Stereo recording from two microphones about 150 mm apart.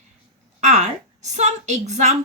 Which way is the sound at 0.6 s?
50° right (ahead or behind).